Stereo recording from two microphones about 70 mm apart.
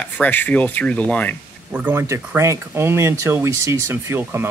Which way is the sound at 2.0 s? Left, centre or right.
Right.